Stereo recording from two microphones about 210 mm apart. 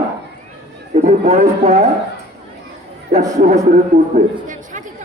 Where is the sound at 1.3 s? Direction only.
30° right (ahead or behind).